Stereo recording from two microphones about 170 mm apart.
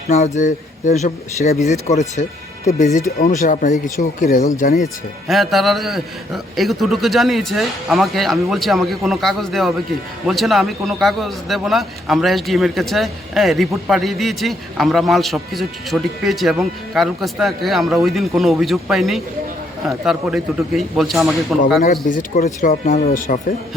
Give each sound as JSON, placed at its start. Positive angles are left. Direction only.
{"t": 0.1, "sound": "speech", "side_deg": 45}
{"t": 5.3, "sound": "a man's voice", "side_deg": 0}
{"t": 21.8, "sound": "speech", "side_deg": 45}